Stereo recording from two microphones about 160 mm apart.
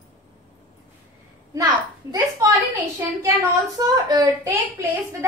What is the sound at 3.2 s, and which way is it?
A child's voice, 20° right (ahead or behind).